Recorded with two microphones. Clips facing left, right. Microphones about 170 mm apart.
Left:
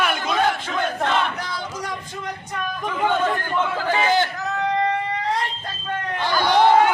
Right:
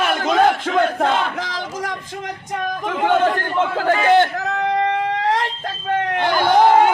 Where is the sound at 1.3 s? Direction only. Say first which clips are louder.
Right 4 dB; 90° right.